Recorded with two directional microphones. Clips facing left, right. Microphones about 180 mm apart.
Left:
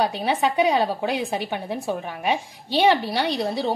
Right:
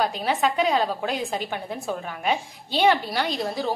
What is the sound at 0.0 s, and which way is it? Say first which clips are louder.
A woman's voice: left 1 dB; 20° left (ahead or behind).